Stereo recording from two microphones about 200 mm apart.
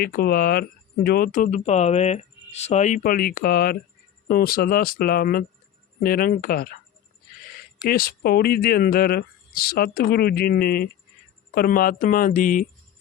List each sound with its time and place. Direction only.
0.0 s speech: 50° left (ahead or behind)
7.9 s speech: 50° left (ahead or behind)